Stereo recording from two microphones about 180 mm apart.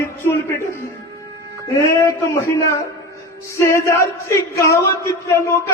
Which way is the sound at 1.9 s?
15° left (ahead or behind).